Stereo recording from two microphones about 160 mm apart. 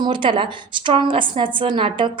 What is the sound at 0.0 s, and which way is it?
Speech, 30° right (ahead or behind).